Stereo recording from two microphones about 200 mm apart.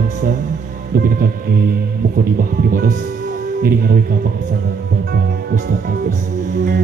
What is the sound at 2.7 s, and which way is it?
Speech, 45° right (ahead or behind).